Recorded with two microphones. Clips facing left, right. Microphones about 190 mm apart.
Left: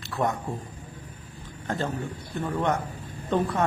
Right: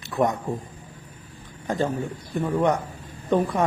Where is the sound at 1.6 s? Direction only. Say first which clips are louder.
Right 4 dB; 15° right (ahead or behind).